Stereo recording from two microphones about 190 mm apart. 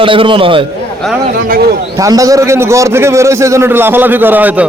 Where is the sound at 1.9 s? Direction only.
20° right (ahead or behind).